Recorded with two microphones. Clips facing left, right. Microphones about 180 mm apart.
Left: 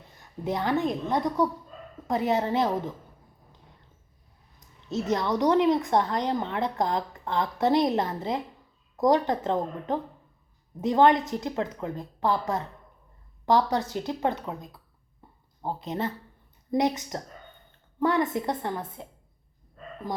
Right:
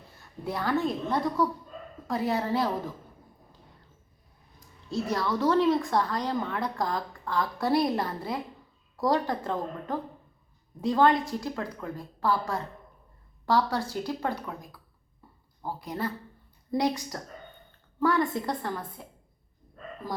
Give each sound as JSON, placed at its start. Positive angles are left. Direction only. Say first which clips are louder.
{"t": 0.4, "sound": "a woman's voice", "louder": "left 2 dB", "side_deg": 20}
{"t": 4.9, "sound": "a woman's voice", "louder": "left 2 dB", "side_deg": 20}
{"t": 15.2, "sound": "a sound", "louder": "left 1 dB", "side_deg": 20}
{"t": 15.6, "sound": "a woman's voice", "louder": "left 2 dB", "side_deg": 20}